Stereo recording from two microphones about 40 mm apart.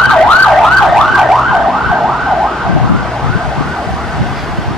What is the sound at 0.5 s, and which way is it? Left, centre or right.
Emergency vehicle, centre.